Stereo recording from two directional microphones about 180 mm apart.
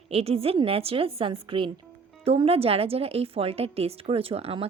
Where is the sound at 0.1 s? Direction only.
35° right (ahead or behind).